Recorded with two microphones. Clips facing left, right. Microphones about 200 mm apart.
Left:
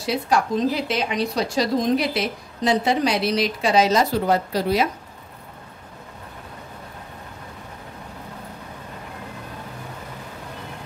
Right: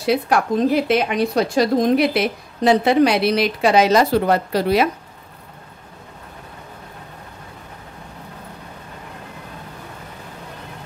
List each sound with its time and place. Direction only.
0.0 s a woman's voice: 60° right (ahead or behind)